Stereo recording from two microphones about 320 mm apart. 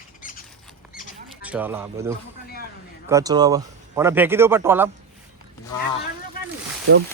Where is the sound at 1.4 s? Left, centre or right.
Centre.